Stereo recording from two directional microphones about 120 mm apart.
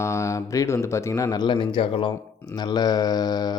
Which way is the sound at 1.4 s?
45° left (ahead or behind).